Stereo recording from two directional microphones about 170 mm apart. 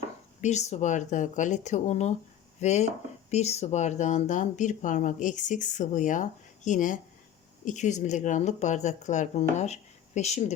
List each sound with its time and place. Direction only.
0.4 s speech: 40° left (ahead or behind)